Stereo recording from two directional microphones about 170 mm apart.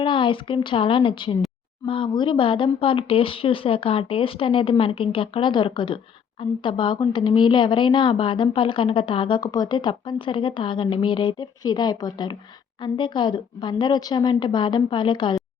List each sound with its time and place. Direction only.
0.0 s speech: 30° left (ahead or behind)